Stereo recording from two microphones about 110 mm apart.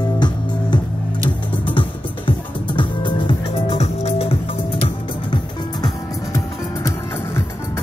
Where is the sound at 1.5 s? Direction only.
50° left (ahead or behind).